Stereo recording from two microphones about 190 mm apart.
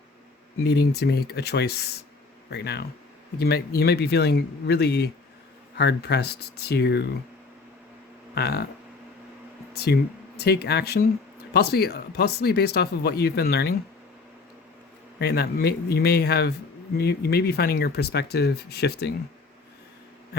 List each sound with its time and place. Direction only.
0.6 s speech: 55° left (ahead or behind)
8.4 s speech: 60° left (ahead or behind)
9.7 s speech: 55° left (ahead or behind)
15.2 s speech: 55° left (ahead or behind)